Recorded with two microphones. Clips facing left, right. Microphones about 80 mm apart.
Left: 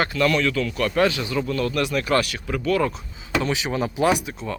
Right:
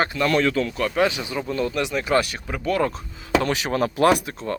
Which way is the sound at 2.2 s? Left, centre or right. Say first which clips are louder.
Left 2 dB; right.